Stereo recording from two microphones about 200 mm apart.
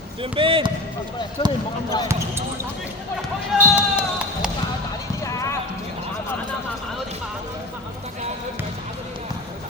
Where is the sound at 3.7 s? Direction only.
5° right (ahead or behind).